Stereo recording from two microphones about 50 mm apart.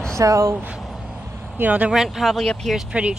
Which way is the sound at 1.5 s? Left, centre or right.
Right.